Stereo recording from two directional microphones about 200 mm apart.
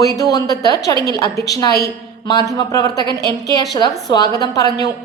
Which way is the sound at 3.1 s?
55° left (ahead or behind).